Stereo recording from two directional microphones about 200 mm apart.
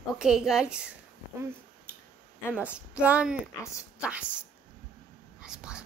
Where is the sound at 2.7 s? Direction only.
5° right (ahead or behind).